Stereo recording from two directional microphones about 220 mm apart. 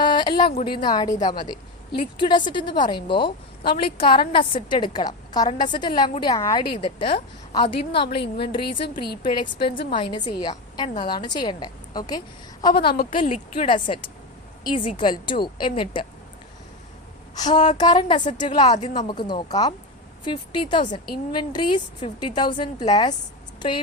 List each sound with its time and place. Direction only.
0.0 s a sound: 20° left (ahead or behind)
0.7 s a woman's voice: 20° left (ahead or behind)
8.0 s a woman's voice: 50° left (ahead or behind)
8.4 s a woman's voice: 25° left (ahead or behind)
9.0 s a woman's voice: 45° left (ahead or behind)
9.6 s a woman's voice: 25° left (ahead or behind)
12.7 s a woman's voice: 45° left (ahead or behind)
13.6 s a woman's voice: 25° left (ahead or behind)
17.3 s a woman's voice: 20° left (ahead or behind)